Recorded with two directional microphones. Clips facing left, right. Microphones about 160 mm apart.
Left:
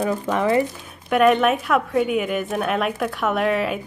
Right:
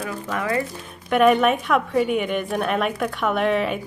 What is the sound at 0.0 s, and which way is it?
Speech, 25° left (ahead or behind).